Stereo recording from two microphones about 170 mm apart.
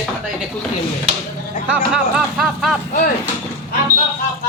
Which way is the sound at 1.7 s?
5° right (ahead or behind).